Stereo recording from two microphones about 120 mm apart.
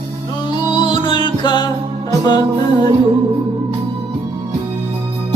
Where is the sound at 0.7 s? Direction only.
40° left (ahead or behind).